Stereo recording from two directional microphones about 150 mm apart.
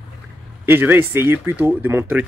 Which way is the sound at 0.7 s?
15° right (ahead or behind).